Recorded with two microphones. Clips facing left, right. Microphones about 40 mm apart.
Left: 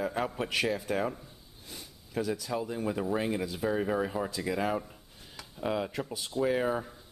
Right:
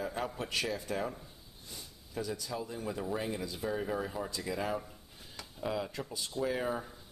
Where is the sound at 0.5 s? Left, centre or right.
Left.